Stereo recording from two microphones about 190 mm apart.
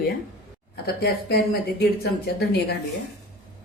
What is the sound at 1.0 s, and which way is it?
Speech, 55° left (ahead or behind).